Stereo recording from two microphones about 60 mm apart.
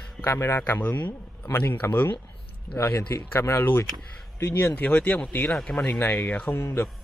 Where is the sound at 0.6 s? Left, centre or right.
Left.